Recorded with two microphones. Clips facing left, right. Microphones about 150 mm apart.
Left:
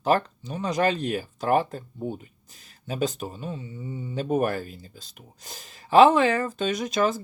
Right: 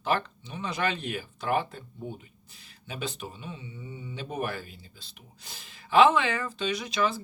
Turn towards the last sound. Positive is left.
turn(degrees=45)  # may be behind; listen again after turning